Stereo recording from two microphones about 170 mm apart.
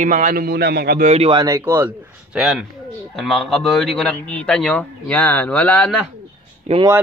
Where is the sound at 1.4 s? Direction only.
15° right (ahead or behind).